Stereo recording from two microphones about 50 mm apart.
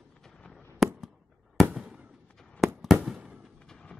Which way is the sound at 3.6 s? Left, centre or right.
Centre.